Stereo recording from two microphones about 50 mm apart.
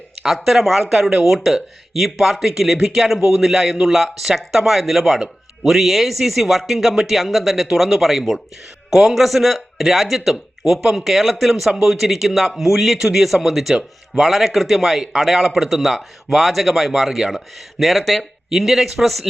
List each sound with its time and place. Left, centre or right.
0.4 s speech: centre
3.4 s speech: centre